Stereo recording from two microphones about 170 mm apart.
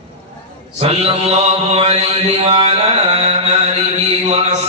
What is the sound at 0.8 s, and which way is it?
Mantra, 35° right (ahead or behind).